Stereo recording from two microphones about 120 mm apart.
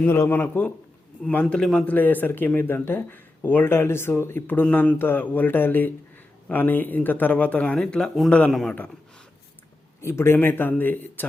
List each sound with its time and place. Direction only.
0.0 s a man's voice: 20° left (ahead or behind); by 8.7 s centre (ahead or behind)
10.0 s speech: 20° left (ahead or behind)